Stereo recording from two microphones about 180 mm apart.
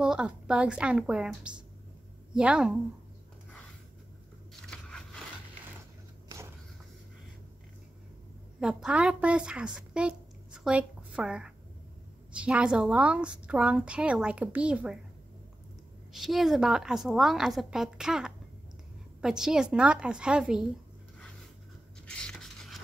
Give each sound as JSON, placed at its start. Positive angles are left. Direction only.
{"t": 0.0, "sound": "a woman's voice", "side_deg": -5}
{"t": 4.6, "sound": "crushing", "side_deg": 5}
{"t": 6.2, "sound": "a sound", "side_deg": -15}
{"t": 8.5, "sound": "a woman's voice", "side_deg": -5}
{"t": 16.1, "sound": "a woman's voice", "side_deg": 0}
{"t": 22.0, "sound": "scrape", "side_deg": 5}